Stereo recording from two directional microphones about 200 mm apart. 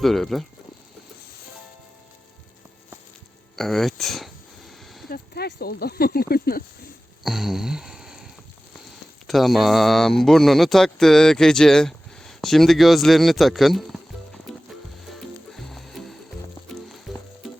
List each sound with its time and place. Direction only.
0.0 s speech: centre (ahead or behind)
3.5 s speech: centre (ahead or behind)
5.0 s speech: 50° left (ahead or behind)
7.3 s a sound: centre (ahead or behind)
9.2 s speech: centre (ahead or behind)
15.1 s music: centre (ahead or behind)